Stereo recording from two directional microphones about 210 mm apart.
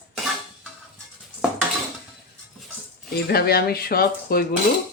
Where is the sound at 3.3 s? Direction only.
45° left (ahead or behind).